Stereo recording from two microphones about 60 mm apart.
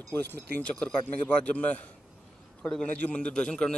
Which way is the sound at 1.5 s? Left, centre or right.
Left.